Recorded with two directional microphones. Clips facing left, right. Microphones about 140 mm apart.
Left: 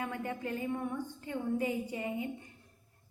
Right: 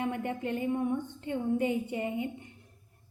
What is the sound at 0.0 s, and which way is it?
A woman's voice, 25° right (ahead or behind).